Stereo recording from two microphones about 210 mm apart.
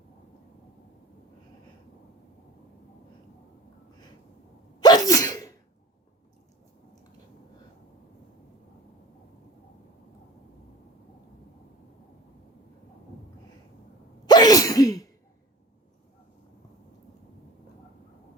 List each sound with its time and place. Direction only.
4.8 s sneeze: 20° left (ahead or behind)
14.3 s sneeze: 20° left (ahead or behind)